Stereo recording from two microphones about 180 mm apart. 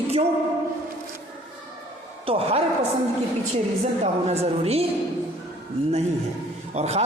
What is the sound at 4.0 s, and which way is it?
Speech, 35° right (ahead or behind).